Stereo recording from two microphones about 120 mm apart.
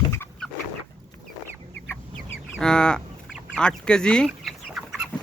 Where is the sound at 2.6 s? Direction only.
5° left (ahead or behind).